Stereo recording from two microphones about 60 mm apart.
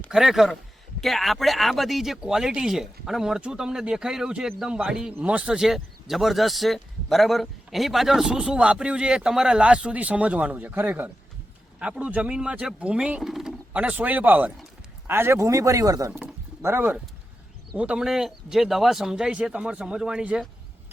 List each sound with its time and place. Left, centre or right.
0.1 s a man's voice: centre
5.5 s a man's voice: centre; by 11.1 s right
11.8 s a man's voice: right; by 13.6 s centre
13.7 s speech: right
15.0 s speech: right
17.7 s a man's voice: centre